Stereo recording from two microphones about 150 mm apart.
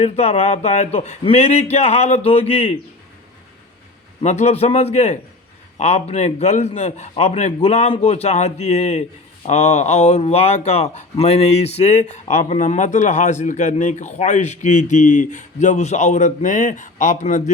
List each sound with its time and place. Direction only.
0.0 s speech: 45° left (ahead or behind)
4.2 s speech: 50° left (ahead or behind)